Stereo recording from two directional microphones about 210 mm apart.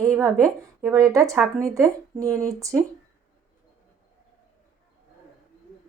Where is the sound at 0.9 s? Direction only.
15° right (ahead or behind).